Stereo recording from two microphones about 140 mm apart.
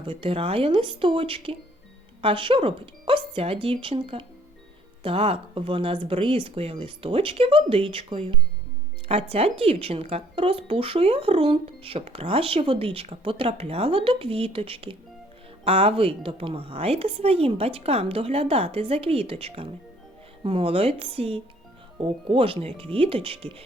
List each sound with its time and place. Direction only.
0.0 s speech: 40° right (ahead or behind)